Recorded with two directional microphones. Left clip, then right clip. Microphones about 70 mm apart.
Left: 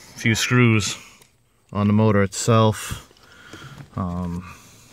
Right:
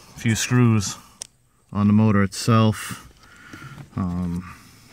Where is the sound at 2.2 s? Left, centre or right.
Left.